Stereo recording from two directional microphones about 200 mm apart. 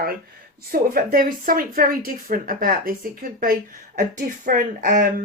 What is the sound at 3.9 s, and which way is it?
Speech, 40° right (ahead or behind).